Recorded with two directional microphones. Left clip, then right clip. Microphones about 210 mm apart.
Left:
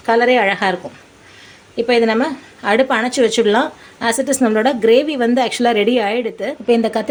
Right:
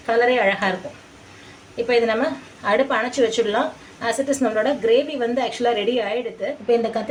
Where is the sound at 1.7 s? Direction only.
50° left (ahead or behind).